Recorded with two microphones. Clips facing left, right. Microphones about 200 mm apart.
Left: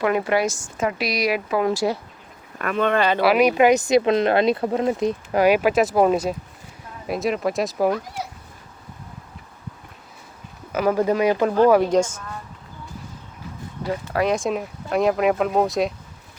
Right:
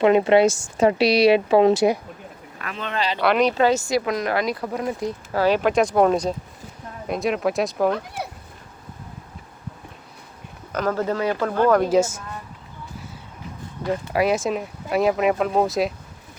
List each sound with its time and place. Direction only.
0.0 s a woman's voice: 25° right (ahead or behind)
2.6 s speech: 55° left (ahead or behind)
3.2 s speech: 5° left (ahead or behind)
10.7 s speech: 10° left (ahead or behind)
11.8 s speech: 5° right (ahead or behind)
14.1 s speech: 10° right (ahead or behind)